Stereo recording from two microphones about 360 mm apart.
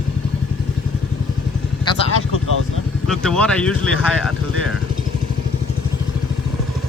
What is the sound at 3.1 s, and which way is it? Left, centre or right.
Speech, centre.